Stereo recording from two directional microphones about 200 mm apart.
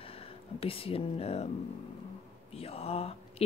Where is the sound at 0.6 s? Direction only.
30° left (ahead or behind).